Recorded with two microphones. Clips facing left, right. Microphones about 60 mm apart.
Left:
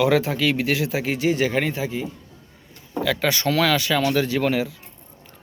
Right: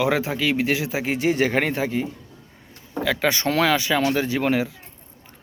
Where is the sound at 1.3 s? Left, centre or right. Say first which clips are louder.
Right 2 dB; right.